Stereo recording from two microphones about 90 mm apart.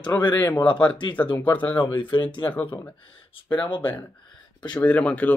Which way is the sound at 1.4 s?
20° left (ahead or behind).